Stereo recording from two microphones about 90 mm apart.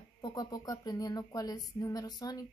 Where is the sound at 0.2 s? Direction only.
45° left (ahead or behind).